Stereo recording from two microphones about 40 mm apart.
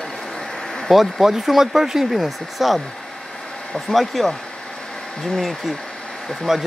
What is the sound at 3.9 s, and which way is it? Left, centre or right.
Speech, centre.